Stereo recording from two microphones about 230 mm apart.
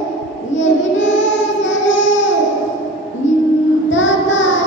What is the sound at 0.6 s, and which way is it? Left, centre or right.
Child singing, left.